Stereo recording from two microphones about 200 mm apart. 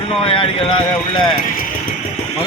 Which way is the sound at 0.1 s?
25° left (ahead or behind).